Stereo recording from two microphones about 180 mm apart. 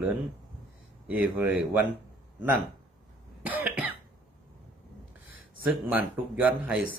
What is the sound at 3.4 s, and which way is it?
Cough, 10° right (ahead or behind).